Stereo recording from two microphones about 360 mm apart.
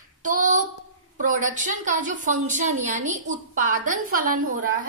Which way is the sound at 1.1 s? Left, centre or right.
Right.